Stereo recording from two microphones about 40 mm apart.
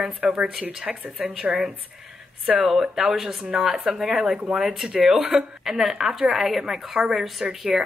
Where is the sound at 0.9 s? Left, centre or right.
Centre.